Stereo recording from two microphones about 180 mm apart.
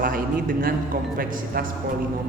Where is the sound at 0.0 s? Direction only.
50° right (ahead or behind).